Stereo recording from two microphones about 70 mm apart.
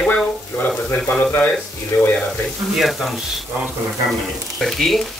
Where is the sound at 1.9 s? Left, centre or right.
Left.